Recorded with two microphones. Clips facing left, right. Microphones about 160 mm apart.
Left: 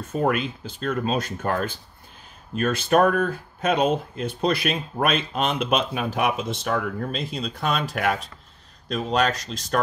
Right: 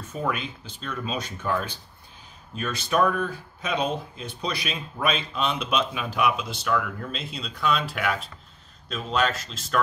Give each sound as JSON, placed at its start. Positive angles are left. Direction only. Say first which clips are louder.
{"t": 0.1, "sound": "speech", "louder": "left 6 dB", "side_deg": 50}